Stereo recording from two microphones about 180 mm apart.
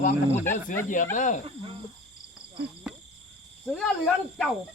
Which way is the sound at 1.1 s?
45° left (ahead or behind).